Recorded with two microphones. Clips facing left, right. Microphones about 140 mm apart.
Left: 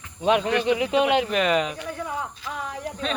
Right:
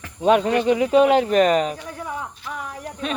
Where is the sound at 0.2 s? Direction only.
40° right (ahead or behind).